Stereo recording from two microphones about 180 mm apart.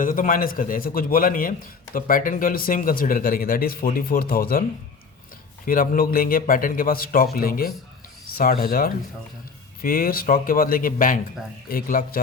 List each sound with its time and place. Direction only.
0.0 s a man's voice: 50° left (ahead or behind)
5.6 s a man's voice: 50° left (ahead or behind)